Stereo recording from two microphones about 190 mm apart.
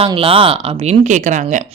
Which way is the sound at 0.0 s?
30° right (ahead or behind).